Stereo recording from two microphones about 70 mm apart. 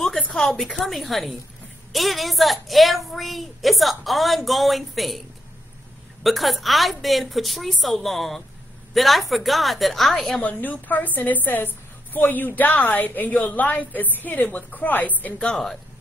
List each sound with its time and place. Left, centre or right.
0.0 s a sound: centre
0.7 s a woman's voice: centre
6.2 s a woman's voice: centre
10.4 s a woman's voice: left
15.5 s a woman's voice: centre